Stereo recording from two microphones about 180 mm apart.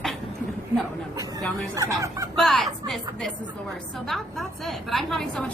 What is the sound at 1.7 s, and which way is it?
Speech, 20° right (ahead or behind).